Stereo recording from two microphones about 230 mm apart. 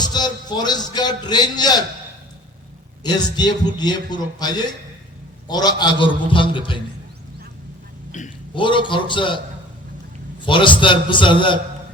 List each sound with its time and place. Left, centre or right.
0.0 s a man's voice: centre
3.0 s a man's voice: centre
8.5 s a man's voice: left
10.4 s a man's voice: left